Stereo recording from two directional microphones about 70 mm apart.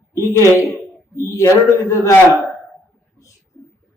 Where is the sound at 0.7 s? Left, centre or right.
Left.